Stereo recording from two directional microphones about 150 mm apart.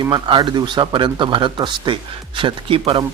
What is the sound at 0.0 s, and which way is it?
A man's voice, 30° right (ahead or behind).